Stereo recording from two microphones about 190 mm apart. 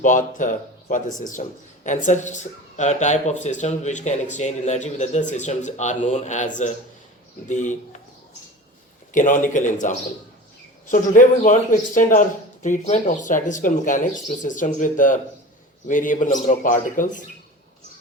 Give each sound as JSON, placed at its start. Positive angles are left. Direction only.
{"t": 0.0, "sound": "speech", "side_deg": 40}
{"t": 9.1, "sound": "speech", "side_deg": 45}